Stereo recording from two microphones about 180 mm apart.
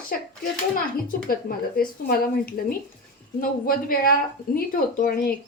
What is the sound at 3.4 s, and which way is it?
A woman's voice, 55° left (ahead or behind).